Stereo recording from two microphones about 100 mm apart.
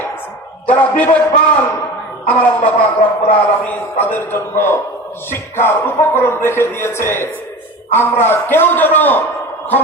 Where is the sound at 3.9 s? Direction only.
25° left (ahead or behind).